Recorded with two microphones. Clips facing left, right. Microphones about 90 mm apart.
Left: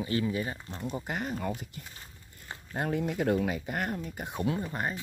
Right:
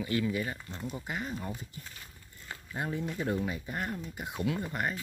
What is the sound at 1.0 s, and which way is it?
Speech, 55° left (ahead or behind).